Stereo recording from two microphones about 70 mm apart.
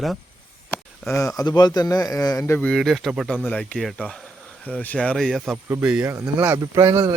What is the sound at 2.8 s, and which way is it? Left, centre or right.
Speech, centre.